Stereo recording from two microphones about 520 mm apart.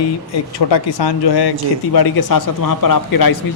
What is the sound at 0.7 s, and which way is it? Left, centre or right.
A man's voice, left.